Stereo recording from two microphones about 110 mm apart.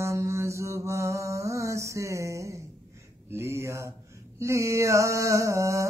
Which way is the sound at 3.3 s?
25° right (ahead or behind).